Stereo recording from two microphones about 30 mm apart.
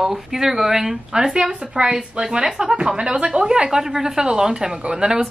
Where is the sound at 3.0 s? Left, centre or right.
Right.